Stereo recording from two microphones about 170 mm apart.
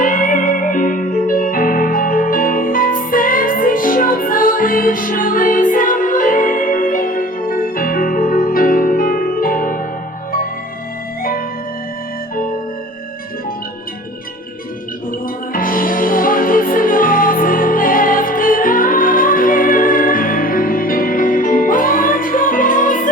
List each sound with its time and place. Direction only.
0.0 s music: 50° left (ahead or behind)
15.5 s music: 55° left (ahead or behind)